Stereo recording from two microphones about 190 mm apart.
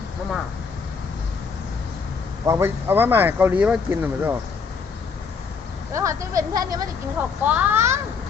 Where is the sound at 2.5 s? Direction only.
15° right (ahead or behind).